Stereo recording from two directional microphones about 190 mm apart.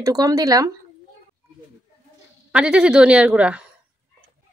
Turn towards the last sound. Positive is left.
turn(degrees=-5)  # may be behind; listen again after turning